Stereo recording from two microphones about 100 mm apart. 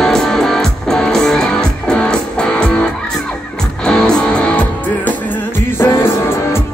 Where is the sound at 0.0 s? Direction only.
5° left (ahead or behind).